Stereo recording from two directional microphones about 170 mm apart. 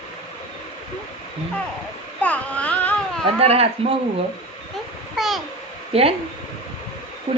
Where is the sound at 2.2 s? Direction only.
10° left (ahead or behind).